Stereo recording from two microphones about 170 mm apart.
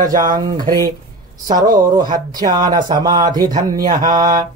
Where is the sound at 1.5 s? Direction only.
20° right (ahead or behind).